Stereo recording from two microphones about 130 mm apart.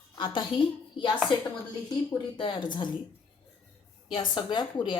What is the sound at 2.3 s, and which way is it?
Speech, 40° left (ahead or behind).